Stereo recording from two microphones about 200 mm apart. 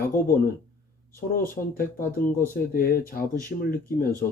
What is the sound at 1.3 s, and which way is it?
Speech, 45° left (ahead or behind).